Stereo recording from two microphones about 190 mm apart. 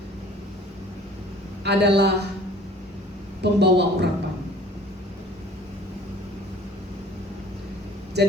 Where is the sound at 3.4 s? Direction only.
60° right (ahead or behind).